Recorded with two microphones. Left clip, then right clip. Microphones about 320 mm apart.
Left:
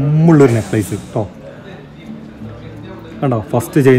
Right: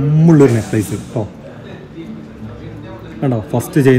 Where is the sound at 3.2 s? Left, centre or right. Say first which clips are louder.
Left 2 dB; centre.